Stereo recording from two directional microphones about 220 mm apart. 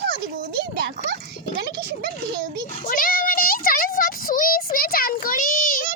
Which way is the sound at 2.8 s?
40° left (ahead or behind).